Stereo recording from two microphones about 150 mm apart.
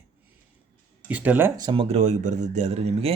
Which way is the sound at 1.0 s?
10° right (ahead or behind).